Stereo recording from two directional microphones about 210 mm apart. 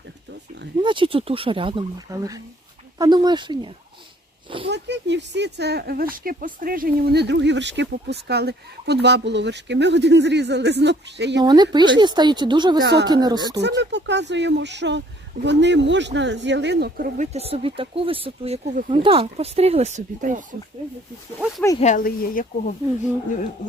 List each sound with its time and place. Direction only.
0.8 s speech: 25° right (ahead or behind)
4.7 s speech: 55° right (ahead or behind)
11.3 s speech: 20° right (ahead or behind)
12.8 s speech: 50° right (ahead or behind)
13.1 s speech: 20° right (ahead or behind)
13.6 s speech: 55° right (ahead or behind)
17.2 s speech: 30° right (ahead or behind)
21.8 s speech: 35° left (ahead or behind)